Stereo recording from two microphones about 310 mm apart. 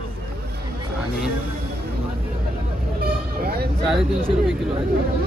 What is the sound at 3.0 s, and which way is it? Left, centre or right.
Vehicle, right.